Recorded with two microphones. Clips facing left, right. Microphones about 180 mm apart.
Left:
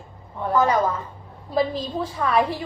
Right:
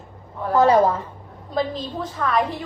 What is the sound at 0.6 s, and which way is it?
Speech, 30° right (ahead or behind).